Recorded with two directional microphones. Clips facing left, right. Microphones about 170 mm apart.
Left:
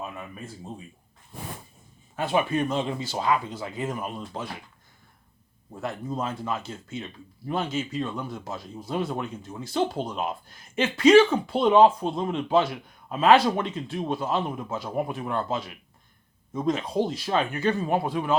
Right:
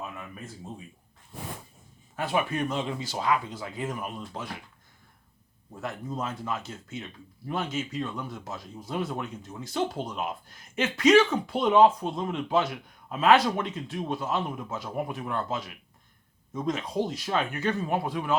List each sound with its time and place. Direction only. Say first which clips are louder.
0.0 s a sound: left 2 dB; 30° left (ahead or behind)
2.1 s speech: left 3 dB; 25° left (ahead or behind)
5.8 s speech: left 3 dB; 30° left (ahead or behind)